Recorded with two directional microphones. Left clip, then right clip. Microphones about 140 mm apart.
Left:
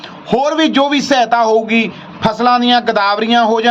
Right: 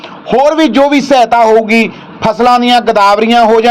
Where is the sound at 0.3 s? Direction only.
30° right (ahead or behind).